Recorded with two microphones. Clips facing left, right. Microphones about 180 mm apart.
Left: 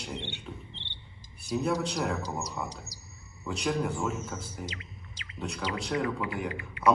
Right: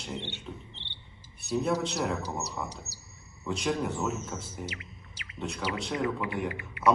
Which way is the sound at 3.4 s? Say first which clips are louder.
Even; centre (ahead or behind).